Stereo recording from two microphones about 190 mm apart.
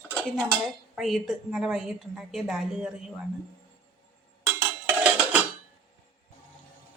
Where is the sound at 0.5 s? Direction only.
Centre (ahead or behind).